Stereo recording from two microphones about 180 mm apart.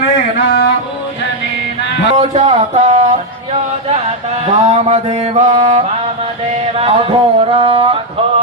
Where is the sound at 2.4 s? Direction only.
35° right (ahead or behind).